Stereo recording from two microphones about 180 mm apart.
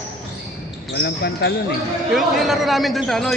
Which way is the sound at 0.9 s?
70° left (ahead or behind).